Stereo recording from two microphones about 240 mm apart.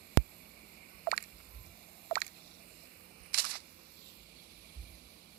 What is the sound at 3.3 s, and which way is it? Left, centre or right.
Single-lens reflex camera, right.